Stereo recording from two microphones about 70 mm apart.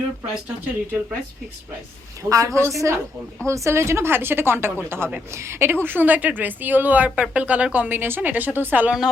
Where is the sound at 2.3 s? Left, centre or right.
Right.